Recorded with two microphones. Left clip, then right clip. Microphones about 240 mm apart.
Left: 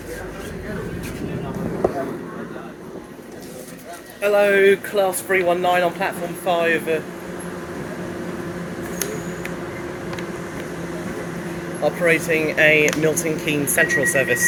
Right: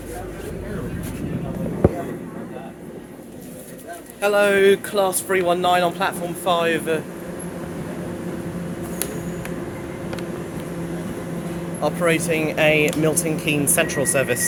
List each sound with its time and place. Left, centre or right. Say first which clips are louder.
4.2 s speech: left 1 dB; right
11.8 s speech: left 2 dB; centre